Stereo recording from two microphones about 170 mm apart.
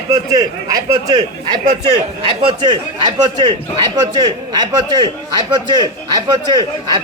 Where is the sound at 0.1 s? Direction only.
20° right (ahead or behind).